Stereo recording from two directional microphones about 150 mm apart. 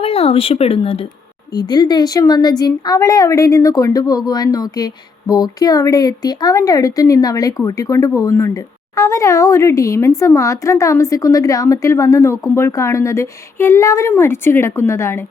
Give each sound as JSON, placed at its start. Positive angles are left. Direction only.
{"t": 0.0, "sound": "speech", "side_deg": 40}
{"t": 1.5, "sound": "a woman's voice", "side_deg": 30}